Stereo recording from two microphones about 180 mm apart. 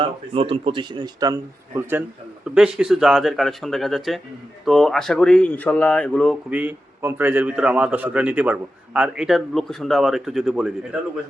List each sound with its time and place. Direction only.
0.0 s speech: 30° right (ahead or behind); by 2.0 s 15° right (ahead or behind)
2.6 s speech: 5° right (ahead or behind)
6.5 s a man's voice: 10° right (ahead or behind)